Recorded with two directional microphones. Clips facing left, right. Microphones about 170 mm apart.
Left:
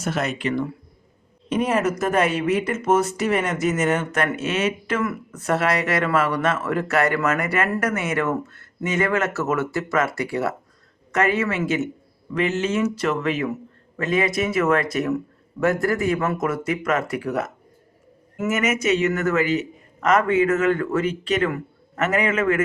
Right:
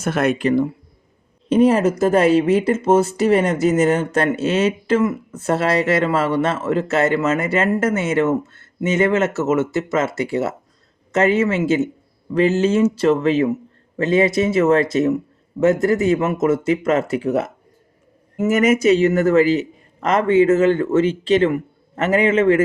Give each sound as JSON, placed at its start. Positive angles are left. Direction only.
{"t": 0.0, "sound": "speech", "side_deg": -55}
{"t": 0.4, "sound": "a woman's voice", "side_deg": -35}